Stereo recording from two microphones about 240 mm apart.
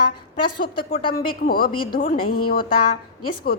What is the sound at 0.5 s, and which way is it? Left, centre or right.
A woman's voice, left.